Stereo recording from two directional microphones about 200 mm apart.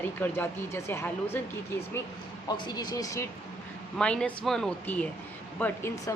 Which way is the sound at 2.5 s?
20° left (ahead or behind).